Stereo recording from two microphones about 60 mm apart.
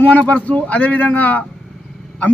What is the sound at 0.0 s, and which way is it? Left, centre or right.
A man's voice, left.